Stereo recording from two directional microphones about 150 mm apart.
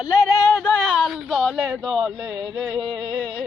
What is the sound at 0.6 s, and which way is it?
A man's voice, centre (ahead or behind).